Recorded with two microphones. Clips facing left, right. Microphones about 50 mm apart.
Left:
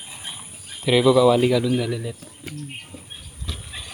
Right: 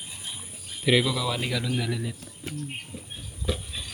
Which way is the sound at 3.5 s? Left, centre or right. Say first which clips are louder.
Right 6 dB; centre.